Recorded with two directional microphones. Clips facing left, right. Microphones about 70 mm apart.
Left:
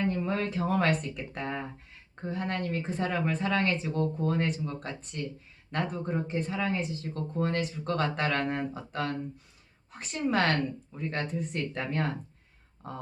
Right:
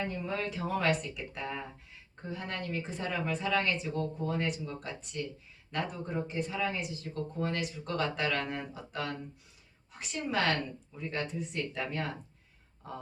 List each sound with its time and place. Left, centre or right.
0.1 s a woman's voice: left